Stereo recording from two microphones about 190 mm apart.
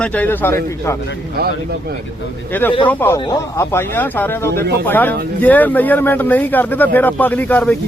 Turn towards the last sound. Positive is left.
turn(degrees=10)  # may be behind; listen again after turning